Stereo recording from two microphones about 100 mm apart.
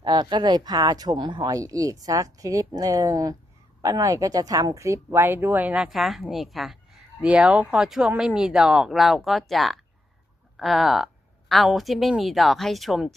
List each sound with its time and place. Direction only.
0.0 s speech: 50° right (ahead or behind); by 6.7 s centre (ahead or behind)
7.2 s speech: 10° right (ahead or behind)